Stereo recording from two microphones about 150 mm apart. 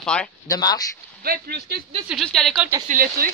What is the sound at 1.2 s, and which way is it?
Speech, 90° right.